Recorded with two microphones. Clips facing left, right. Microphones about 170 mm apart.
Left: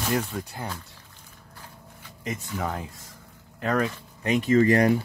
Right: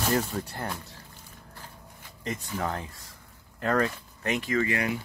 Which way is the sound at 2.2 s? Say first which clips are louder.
Left 1 dB; 10° left (ahead or behind).